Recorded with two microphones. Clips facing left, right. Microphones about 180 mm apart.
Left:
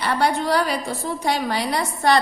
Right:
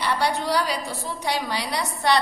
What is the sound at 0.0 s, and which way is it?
A woman's voice, 50° left (ahead or behind).